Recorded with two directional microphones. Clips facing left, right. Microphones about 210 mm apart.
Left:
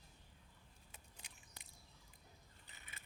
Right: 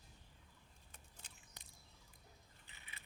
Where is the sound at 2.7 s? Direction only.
45° left (ahead or behind).